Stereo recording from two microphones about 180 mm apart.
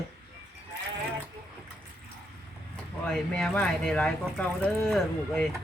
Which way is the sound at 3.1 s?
Centre (ahead or behind).